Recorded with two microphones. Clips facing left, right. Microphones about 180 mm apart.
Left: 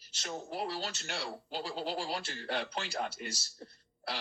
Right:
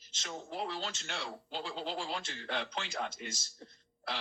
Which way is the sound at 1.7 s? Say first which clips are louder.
Left 3 dB; 5° left (ahead or behind).